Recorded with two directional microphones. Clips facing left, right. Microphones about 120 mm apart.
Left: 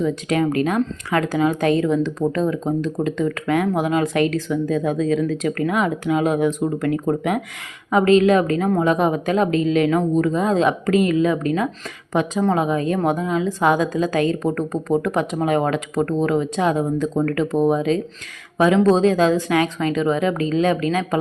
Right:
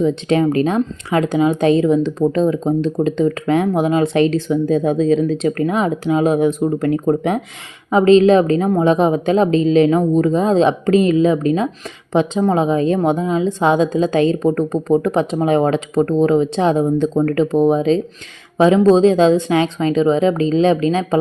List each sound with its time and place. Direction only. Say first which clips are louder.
0.0 s speech: right 4 dB; 25° right (ahead or behind)